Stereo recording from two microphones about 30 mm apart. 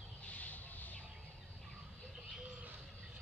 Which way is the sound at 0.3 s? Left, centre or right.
Left.